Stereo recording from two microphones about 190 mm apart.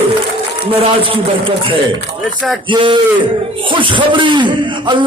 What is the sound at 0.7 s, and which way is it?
A man's voice, 30° right (ahead or behind).